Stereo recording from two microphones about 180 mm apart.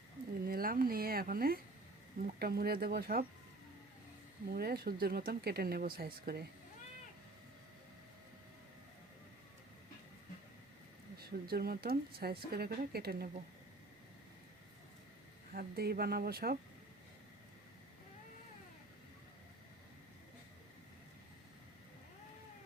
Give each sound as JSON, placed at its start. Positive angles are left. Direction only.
{"t": 0.4, "sound": "a sound", "side_deg": -55}
{"t": 2.2, "sound": "speech", "side_deg": -60}
{"t": 4.4, "sound": "speech", "side_deg": -60}
{"t": 11.2, "sound": "speech", "side_deg": -60}
{"t": 15.5, "sound": "speech", "side_deg": -60}